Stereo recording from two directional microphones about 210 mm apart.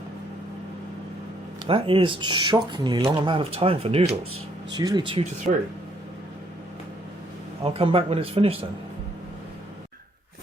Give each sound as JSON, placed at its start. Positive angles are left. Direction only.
{"t": 1.6, "sound": "speech", "side_deg": -25}
{"t": 4.8, "sound": "speech", "side_deg": -20}
{"t": 7.6, "sound": "speech", "side_deg": -25}